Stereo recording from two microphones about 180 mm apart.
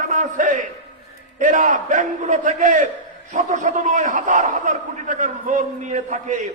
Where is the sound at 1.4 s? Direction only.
45° right (ahead or behind).